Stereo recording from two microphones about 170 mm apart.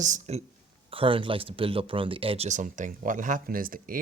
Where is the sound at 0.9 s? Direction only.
30° right (ahead or behind).